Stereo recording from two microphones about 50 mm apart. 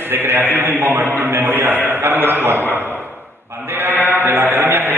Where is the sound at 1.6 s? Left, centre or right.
Right.